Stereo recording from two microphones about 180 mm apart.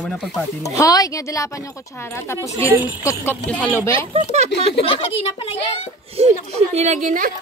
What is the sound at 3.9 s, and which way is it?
Speech, 30° right (ahead or behind).